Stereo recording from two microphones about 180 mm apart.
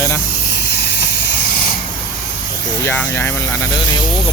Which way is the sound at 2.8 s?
10° left (ahead or behind).